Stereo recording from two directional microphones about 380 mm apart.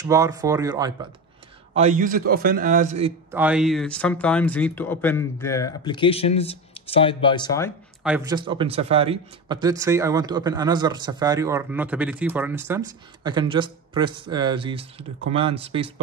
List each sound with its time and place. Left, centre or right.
0.0 s a man's voice: centre
3.3 s speech: centre
8.0 s speech: centre